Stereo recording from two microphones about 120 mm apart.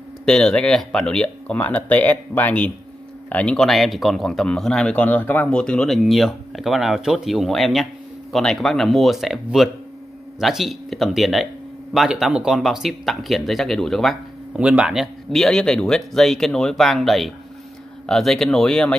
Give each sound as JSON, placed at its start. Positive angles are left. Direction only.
{"t": 0.2, "sound": "speech", "side_deg": 5}
{"t": 14.6, "sound": "speech", "side_deg": -10}